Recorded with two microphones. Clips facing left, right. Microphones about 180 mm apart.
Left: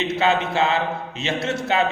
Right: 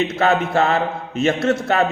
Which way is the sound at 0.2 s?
50° right (ahead or behind).